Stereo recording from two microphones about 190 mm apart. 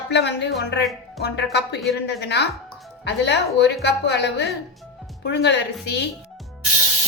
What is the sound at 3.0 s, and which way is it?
Speech, 65° left (ahead or behind).